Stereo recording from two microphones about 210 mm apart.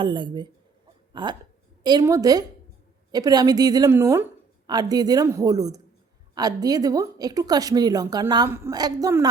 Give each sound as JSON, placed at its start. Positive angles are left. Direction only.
{"t": 0.0, "sound": "a woman's voice", "side_deg": -20}